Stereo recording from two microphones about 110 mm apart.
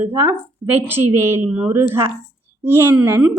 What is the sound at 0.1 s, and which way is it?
A woman's voice, 20° right (ahead or behind).